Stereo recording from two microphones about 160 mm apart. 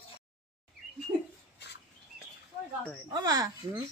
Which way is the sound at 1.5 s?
90° left.